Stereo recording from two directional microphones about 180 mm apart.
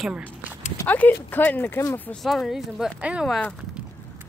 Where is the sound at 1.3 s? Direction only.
10° left (ahead or behind).